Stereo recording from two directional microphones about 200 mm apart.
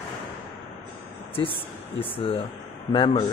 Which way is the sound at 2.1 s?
25° left (ahead or behind).